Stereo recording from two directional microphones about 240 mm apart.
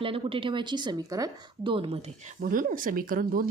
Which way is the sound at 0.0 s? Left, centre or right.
Right.